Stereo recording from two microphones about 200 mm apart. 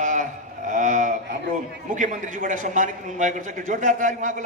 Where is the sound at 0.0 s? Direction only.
40° right (ahead or behind).